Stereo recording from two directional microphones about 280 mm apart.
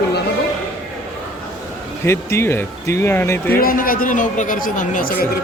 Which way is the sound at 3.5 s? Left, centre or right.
Left.